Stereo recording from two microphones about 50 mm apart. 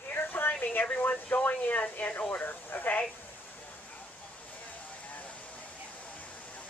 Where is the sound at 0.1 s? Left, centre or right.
Left.